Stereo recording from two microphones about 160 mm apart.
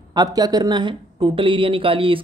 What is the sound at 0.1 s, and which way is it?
Speech, 25° right (ahead or behind).